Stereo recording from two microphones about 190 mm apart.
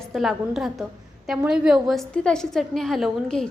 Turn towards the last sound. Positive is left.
turn(degrees=0)  # may be behind; listen again after turning